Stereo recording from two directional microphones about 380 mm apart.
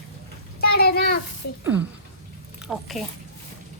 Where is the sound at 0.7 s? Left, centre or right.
Left.